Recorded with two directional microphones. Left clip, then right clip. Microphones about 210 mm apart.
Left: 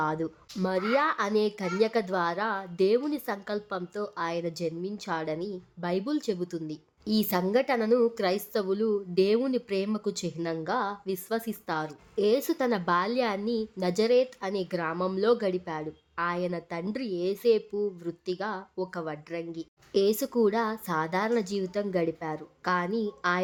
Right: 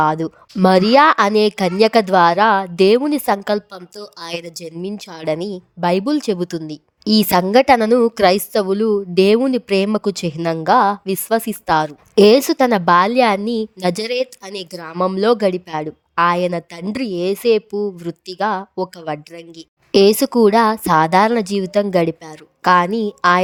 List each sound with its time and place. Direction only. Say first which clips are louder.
0.0 s a woman's voice: right 13 dB; 40° right (ahead or behind)